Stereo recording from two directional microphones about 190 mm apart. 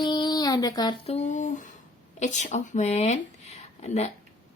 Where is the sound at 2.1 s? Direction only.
40° left (ahead or behind).